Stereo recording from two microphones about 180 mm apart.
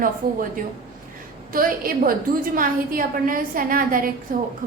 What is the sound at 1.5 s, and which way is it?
A woman's voice, 50° right (ahead or behind).